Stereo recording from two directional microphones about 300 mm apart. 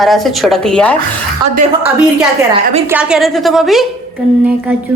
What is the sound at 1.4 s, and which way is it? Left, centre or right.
Speech, centre.